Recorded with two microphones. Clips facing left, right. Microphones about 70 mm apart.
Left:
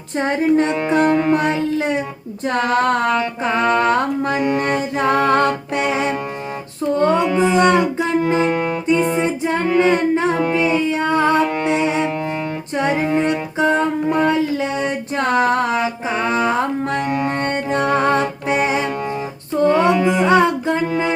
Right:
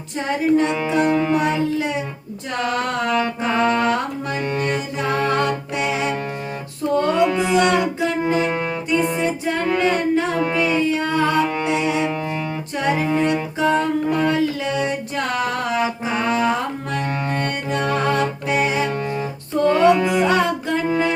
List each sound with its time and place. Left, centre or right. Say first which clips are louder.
0.2 s music: left 2 dB; left
6.9 s music: left 1 dB; left
17.0 s music: left 4 dB; centre
17.3 s music: left 3 dB; left